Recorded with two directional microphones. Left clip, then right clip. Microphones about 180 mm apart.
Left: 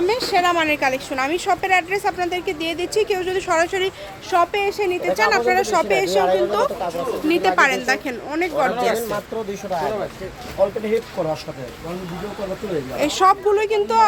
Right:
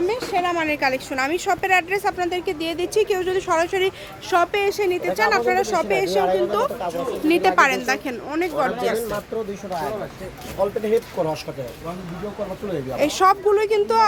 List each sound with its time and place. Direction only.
0.1 s a woman's voice: 10° left (ahead or behind); by 3.9 s 10° right (ahead or behind)
4.3 s speech: 20° right (ahead or behind)
5.0 s a woman's voice: 5° right (ahead or behind)
10.6 s speech: 65° right (ahead or behind)
11.2 s speech: 50° right (ahead or behind)
13.0 s a woman's voice: 15° right (ahead or behind)